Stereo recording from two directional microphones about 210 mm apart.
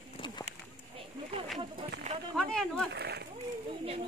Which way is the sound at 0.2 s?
25° left (ahead or behind).